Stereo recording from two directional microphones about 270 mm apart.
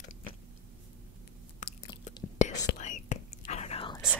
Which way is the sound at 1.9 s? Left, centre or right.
Left.